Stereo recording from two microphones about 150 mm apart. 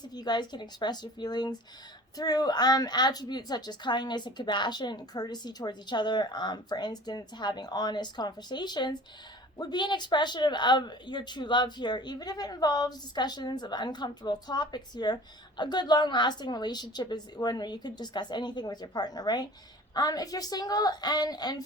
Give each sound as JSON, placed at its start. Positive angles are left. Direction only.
{"t": 0.1, "sound": "a woman's voice", "side_deg": 30}